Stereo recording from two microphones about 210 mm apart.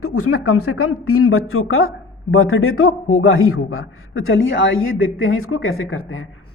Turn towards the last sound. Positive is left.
turn(degrees=75)  # may be behind; listen again after turning